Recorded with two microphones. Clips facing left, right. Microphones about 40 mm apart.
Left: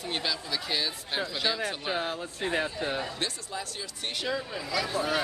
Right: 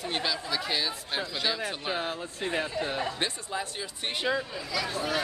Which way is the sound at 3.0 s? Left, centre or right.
Centre.